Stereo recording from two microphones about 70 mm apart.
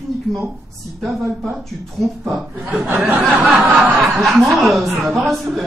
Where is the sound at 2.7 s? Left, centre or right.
Right.